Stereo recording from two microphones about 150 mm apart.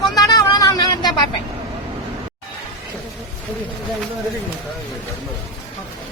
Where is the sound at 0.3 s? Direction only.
25° left (ahead or behind).